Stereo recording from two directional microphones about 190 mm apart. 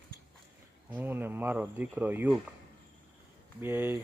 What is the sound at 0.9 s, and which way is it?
Speech, 10° right (ahead or behind).